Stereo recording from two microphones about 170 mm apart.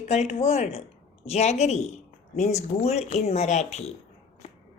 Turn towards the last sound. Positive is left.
turn(degrees=40)  # may be behind; listen again after turning